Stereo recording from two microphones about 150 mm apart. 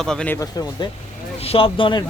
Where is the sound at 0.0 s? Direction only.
5° left (ahead or behind).